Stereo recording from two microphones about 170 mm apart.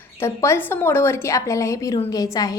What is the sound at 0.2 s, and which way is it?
A woman's voice, 15° left (ahead or behind).